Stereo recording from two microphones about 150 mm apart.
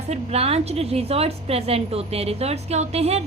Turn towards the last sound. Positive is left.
turn(degrees=-45)  # may be behind; listen again after turning